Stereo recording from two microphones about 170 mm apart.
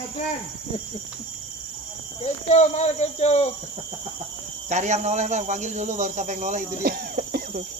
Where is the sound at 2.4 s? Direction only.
40° left (ahead or behind).